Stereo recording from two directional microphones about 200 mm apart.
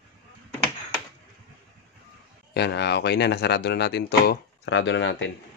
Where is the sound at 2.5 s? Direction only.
55° left (ahead or behind).